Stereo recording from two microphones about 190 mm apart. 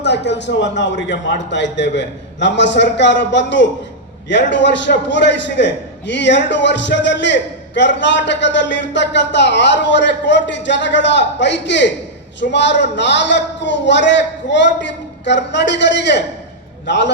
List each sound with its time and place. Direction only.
0.0 s a man's voice: 65° left (ahead or behind)